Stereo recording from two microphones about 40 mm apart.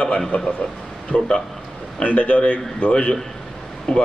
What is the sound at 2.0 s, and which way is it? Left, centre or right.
A man's voice, left.